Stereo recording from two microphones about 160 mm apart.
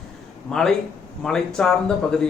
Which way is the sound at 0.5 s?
5° left (ahead or behind).